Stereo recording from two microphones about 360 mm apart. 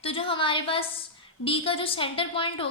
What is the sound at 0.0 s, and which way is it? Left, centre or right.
A woman's voice, centre.